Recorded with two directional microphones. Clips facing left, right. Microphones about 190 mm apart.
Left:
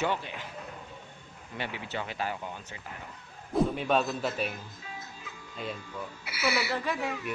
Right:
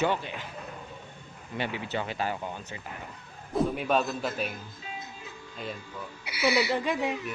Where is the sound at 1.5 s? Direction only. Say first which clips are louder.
Right 4 dB; 20° right (ahead or behind).